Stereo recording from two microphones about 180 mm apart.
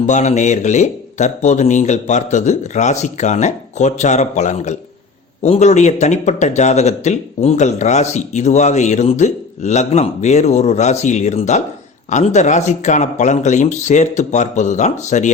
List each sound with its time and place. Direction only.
0.0 s speech: 40° left (ahead or behind)